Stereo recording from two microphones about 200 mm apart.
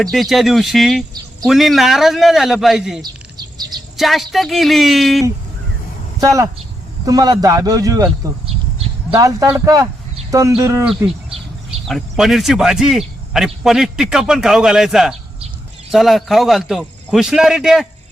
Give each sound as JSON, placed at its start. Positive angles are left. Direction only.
{"t": 0.0, "sound": "a man's voice", "side_deg": 0}
{"t": 3.0, "sound": "chirp", "side_deg": -20}
{"t": 3.9, "sound": "a man's voice", "side_deg": 0}
{"t": 6.1, "sound": "a man's voice", "side_deg": -15}
{"t": 11.9, "sound": "a man's voice", "side_deg": 0}